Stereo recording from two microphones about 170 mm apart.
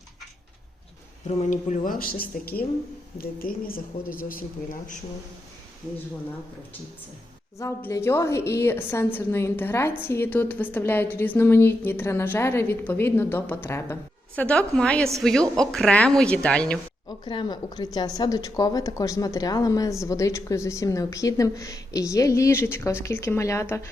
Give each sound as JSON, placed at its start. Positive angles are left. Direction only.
{"t": 1.4, "sound": "speech", "side_deg": 45}
{"t": 7.6, "sound": "a woman's voice", "side_deg": 15}
{"t": 17.1, "sound": "speech", "side_deg": 25}